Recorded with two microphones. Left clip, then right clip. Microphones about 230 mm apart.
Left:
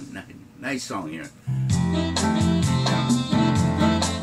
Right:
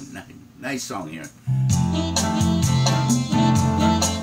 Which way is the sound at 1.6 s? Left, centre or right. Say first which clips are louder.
Right 1 dB; right.